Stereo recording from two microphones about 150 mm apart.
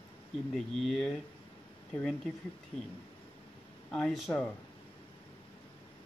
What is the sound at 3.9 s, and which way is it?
Speech, centre (ahead or behind).